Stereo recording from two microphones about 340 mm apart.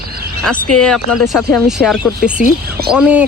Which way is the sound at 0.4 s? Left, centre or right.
Centre.